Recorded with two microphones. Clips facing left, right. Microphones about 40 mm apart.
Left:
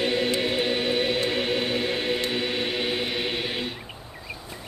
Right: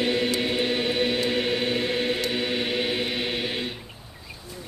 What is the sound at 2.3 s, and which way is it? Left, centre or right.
Chant, centre.